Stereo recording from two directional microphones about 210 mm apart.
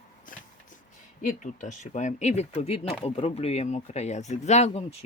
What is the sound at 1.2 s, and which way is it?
Speech, 40° left (ahead or behind).